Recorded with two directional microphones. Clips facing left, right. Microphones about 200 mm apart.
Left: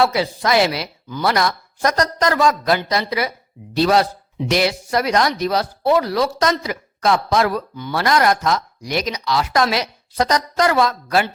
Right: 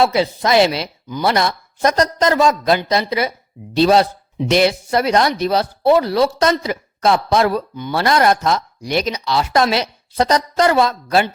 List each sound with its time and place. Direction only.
0.0 s speech: 25° right (ahead or behind)